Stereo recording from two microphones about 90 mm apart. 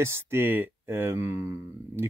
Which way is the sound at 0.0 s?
30° right (ahead or behind).